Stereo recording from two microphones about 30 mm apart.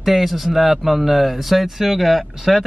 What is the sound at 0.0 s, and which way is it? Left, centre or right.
A man's voice, centre.